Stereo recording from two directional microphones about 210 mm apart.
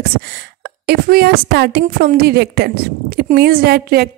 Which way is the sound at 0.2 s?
50° right (ahead or behind).